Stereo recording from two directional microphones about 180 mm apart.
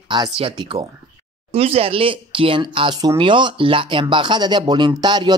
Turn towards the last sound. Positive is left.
turn(degrees=-25)  # may be behind; listen again after turning